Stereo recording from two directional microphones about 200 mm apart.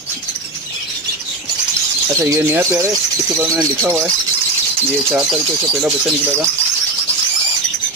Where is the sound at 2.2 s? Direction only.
15° right (ahead or behind).